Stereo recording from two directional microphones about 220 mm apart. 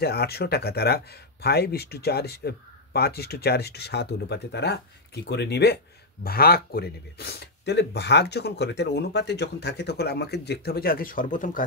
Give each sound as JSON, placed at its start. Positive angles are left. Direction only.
{"t": 0.0, "sound": "speech", "side_deg": 45}